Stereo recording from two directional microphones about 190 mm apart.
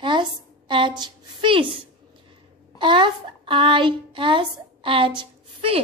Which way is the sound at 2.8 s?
25° right (ahead or behind).